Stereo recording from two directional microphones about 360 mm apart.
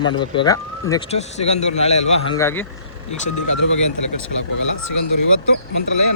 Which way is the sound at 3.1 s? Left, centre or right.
Left.